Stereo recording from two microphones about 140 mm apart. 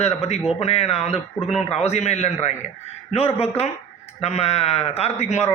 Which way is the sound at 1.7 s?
50° left (ahead or behind).